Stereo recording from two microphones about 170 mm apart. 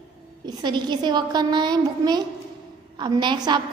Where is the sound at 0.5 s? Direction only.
25° right (ahead or behind).